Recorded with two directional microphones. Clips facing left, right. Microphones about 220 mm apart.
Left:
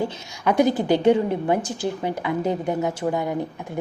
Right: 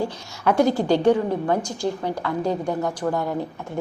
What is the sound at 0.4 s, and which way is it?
A woman's voice, 20° left (ahead or behind).